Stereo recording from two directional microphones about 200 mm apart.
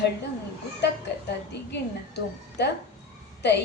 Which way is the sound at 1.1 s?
60° left (ahead or behind).